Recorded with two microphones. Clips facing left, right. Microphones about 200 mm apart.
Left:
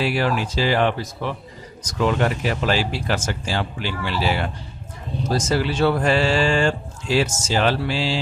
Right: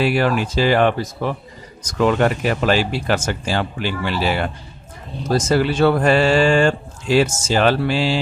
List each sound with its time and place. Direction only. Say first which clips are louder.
0.0 s speech: right 4 dB; 55° right (ahead or behind)